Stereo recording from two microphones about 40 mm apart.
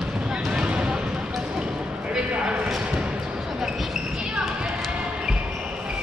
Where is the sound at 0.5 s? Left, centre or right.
Right.